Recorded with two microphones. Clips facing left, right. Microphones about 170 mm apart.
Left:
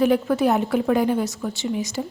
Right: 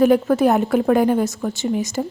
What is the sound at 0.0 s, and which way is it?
A woman's voice, 45° right (ahead or behind).